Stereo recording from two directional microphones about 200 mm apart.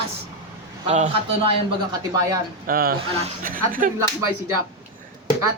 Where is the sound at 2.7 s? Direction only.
50° right (ahead or behind).